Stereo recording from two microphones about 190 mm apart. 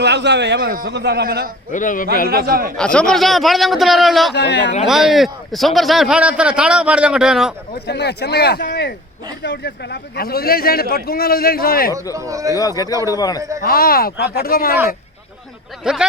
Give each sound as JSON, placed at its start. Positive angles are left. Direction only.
{"t": 0.0, "sound": "a man's voice", "side_deg": -65}
{"t": 1.7, "sound": "a man's voice", "side_deg": 45}
{"t": 2.2, "sound": "a man's voice", "side_deg": -50}
{"t": 2.7, "sound": "a man's voice", "side_deg": 5}
{"t": 4.4, "sound": "speech", "side_deg": 65}
{"t": 4.9, "sound": "a man's voice", "side_deg": 0}
{"t": 7.9, "sound": "a man's voice", "side_deg": 60}
{"t": 12.1, "sound": "speech", "side_deg": -15}
{"t": 12.5, "sound": "a man's voice", "side_deg": 20}
{"t": 13.6, "sound": "a man's voice", "side_deg": 50}
{"t": 15.8, "sound": "a man's voice", "side_deg": -5}